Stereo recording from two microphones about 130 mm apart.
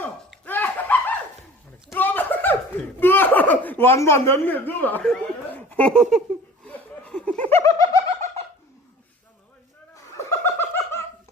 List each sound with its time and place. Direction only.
0.4 s a sound: 15° left (ahead or behind)
3.0 s speech: 15° left (ahead or behind)
5.5 s laughter: 10° left (ahead or behind)
7.5 s laughter: 25° left (ahead or behind)
9.9 s laughter: 20° left (ahead or behind)